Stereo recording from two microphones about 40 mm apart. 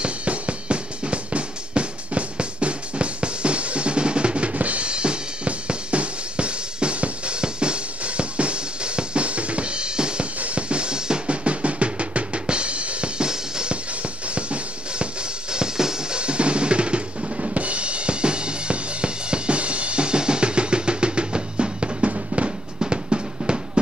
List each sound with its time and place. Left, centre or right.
0.0 s music: right
10.4 s drum: right
13.2 s music: centre
14.3 s music: right
15.5 s drum: centre
16.2 s drum kit: right
22.8 s drum: right